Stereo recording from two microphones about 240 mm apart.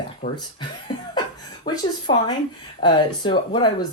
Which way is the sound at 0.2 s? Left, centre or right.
Left.